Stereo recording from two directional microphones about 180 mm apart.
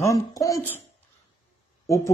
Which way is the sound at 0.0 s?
20° left (ahead or behind).